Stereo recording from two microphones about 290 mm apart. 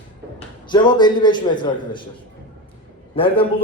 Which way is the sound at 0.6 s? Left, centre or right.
Centre.